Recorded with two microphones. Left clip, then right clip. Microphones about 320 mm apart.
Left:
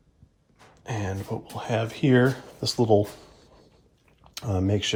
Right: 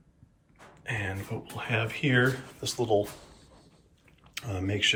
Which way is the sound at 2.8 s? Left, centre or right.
Left.